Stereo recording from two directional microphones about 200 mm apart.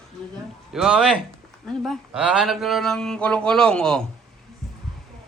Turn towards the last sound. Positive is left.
turn(degrees=5)  # may be behind; listen again after turning